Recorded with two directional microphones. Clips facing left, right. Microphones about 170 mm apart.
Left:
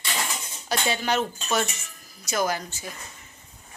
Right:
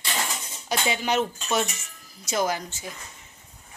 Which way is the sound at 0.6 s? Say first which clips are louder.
Even; 15° right (ahead or behind).